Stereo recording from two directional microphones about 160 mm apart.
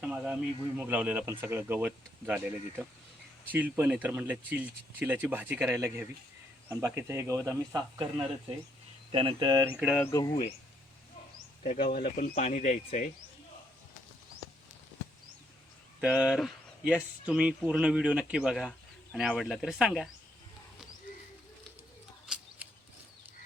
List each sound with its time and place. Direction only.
0.0 s speech: 5° right (ahead or behind)
6.7 s speech: 20° right (ahead or behind)
9.1 s speech: 30° right (ahead or behind)
9.7 s speech: 5° right (ahead or behind)
10.0 s speech: 20° left (ahead or behind)
11.6 s speech: 50° left (ahead or behind)
11.9 s speech: 65° left (ahead or behind); by 13.1 s 50° left (ahead or behind)
16.0 s speech: 5° right (ahead or behind)